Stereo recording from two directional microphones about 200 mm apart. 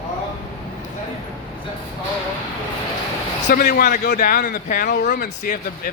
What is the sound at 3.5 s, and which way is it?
A man's voice, 45° left (ahead or behind).